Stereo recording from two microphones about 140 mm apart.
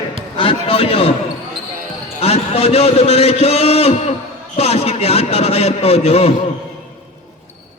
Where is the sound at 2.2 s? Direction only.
45° left (ahead or behind).